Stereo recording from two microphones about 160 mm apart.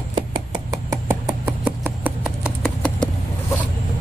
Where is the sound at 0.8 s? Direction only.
25° right (ahead or behind).